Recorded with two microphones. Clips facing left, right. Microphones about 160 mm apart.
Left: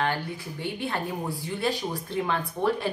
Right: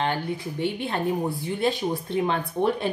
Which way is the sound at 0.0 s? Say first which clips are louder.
Right 2 dB; 20° right (ahead or behind).